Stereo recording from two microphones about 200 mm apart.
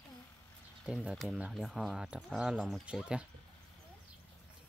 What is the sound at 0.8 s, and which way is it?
Speech, 5° right (ahead or behind).